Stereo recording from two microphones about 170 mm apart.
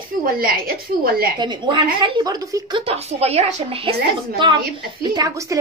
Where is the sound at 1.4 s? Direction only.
25° right (ahead or behind).